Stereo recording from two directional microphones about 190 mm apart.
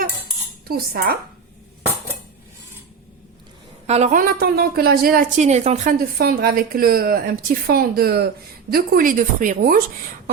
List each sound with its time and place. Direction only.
0.7 s a woman's voice: 55° right (ahead or behind)
3.8 s a woman's voice: 35° right (ahead or behind)
6.1 s a woman's voice: 50° right (ahead or behind)